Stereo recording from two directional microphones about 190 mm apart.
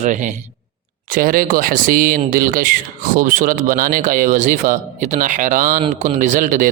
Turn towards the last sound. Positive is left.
turn(degrees=-45)  # may be behind; listen again after turning